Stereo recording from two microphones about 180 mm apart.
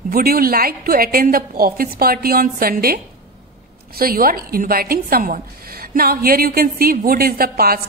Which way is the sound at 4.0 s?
55° right (ahead or behind).